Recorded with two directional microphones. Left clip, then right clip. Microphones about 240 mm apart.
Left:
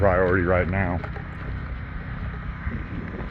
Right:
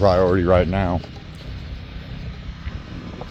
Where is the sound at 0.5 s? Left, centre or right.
Right.